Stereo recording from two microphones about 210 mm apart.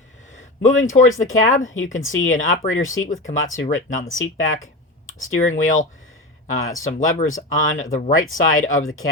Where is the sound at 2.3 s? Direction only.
40° left (ahead or behind).